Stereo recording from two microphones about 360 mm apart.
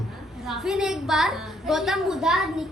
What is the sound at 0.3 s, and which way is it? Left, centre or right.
A woman's voice, centre.